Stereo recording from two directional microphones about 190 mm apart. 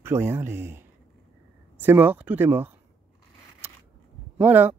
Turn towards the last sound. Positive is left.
turn(degrees=-10)  # may be behind; listen again after turning